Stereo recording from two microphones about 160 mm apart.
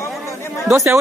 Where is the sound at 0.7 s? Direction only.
15° right (ahead or behind).